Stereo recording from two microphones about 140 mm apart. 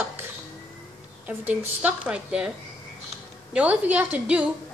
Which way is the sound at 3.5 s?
10° right (ahead or behind).